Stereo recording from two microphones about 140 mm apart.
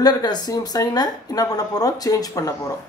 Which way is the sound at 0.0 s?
30° left (ahead or behind).